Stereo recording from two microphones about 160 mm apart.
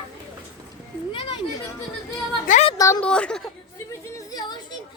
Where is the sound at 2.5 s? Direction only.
55° left (ahead or behind).